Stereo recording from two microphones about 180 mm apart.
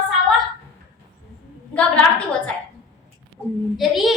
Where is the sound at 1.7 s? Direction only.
5° left (ahead or behind).